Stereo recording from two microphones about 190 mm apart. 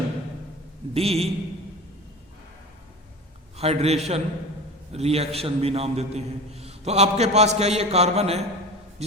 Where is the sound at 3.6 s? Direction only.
35° right (ahead or behind).